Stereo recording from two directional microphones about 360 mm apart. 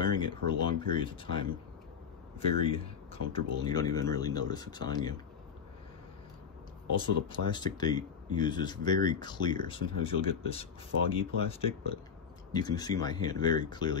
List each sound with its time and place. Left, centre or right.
0.0 s speech: centre
2.6 s speech: centre
7.0 s speech: centre